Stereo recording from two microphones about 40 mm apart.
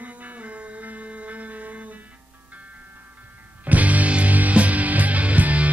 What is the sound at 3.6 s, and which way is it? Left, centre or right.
Music, right.